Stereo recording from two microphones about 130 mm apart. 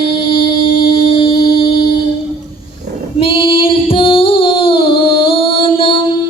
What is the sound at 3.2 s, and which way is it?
Female singing, 45° left (ahead or behind).